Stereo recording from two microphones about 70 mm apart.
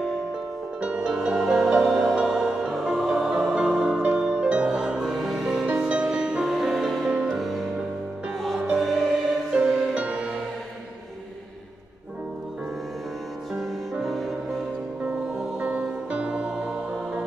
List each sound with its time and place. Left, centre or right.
0.7 s music: centre
5.7 s music: centre
8.7 s music: centre
9.5 s music: centre
14.0 s music: centre
15.6 s music: centre